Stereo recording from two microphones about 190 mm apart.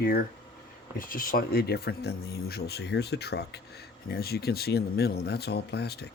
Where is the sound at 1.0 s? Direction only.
50° left (ahead or behind).